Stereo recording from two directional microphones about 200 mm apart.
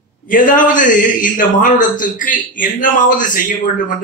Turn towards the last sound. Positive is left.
turn(degrees=40)  # may be behind; listen again after turning